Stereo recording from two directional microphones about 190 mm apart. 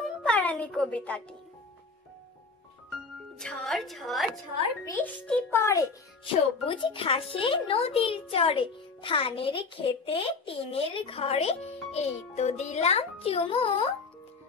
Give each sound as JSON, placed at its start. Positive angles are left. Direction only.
{"t": 0.0, "sound": "music", "side_deg": 5}
{"t": 3.3, "sound": "a woman's voice", "side_deg": 0}
{"t": 6.2, "sound": "a child's voice", "side_deg": 25}